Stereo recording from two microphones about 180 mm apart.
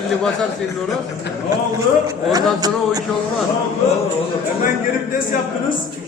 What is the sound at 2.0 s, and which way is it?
A man's voice, 20° right (ahead or behind).